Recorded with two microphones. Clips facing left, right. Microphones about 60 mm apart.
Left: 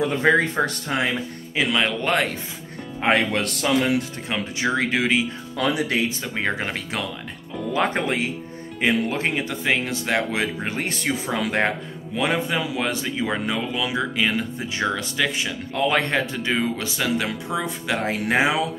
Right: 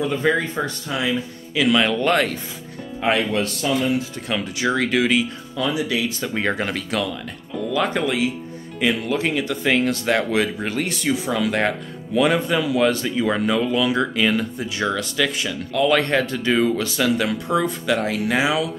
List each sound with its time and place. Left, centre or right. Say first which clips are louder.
0.0 s speech: even; left
0.8 s speech: even; left
1.7 s a man's voice: right 5 dB; centre
3.0 s speech: even; left
3.3 s a man's voice: even; left
4.3 s speech: right 2 dB; centre
5.6 s speech: even; left
6.2 s speech: right 3 dB; centre
6.6 s a man's voice: right 4 dB; centre
7.7 s speech: right 1 dB; left; by 10.7 s centre
10.7 s speech: right 3 dB; left
12.2 s a man's voice: right 4 dB; centre